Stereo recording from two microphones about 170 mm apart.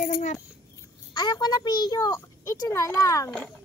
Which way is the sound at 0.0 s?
50° left (ahead or behind).